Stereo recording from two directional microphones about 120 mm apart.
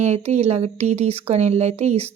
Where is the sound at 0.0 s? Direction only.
70° right (ahead or behind).